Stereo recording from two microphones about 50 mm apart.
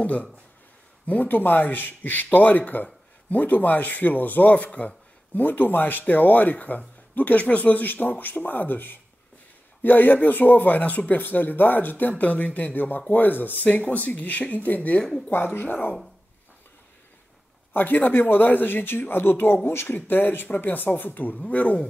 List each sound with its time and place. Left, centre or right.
0.0 s speech: left
15.2 s speech: left
17.7 s speech: left